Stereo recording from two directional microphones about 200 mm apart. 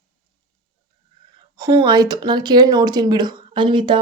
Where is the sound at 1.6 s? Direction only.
15° right (ahead or behind).